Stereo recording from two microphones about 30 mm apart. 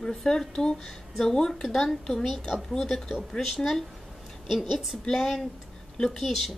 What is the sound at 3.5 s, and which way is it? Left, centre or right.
Speech, centre.